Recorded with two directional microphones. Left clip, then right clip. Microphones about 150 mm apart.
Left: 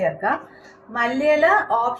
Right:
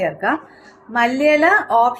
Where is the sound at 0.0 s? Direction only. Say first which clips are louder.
Right 2 dB; 65° right (ahead or behind).